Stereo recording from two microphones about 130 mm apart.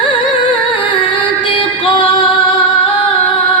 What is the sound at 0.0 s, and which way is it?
Music, 40° left (ahead or behind).